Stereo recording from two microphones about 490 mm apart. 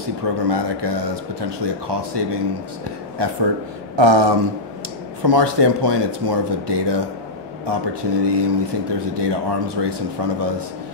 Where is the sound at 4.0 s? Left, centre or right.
Right.